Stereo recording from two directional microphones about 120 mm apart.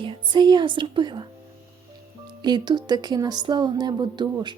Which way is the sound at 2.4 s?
40° right (ahead or behind).